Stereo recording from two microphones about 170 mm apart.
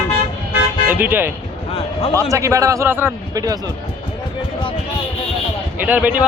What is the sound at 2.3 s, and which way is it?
Speech, 20° right (ahead or behind).